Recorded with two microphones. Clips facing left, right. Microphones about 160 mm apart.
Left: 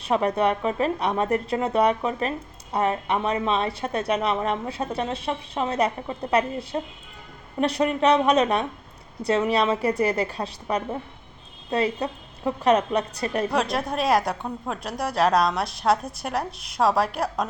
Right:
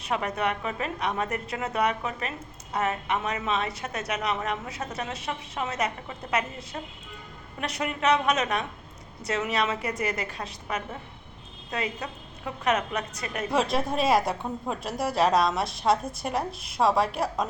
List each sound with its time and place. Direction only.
0.0 s a woman's voice: 35° left (ahead or behind)
13.5 s a woman's voice: centre (ahead or behind)